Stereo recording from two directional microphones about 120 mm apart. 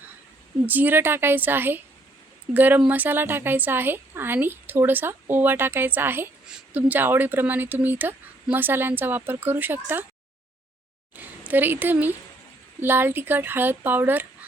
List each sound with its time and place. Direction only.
0.6 s a woman's voice: 15° right (ahead or behind)
11.1 s a woman's voice: 15° right (ahead or behind)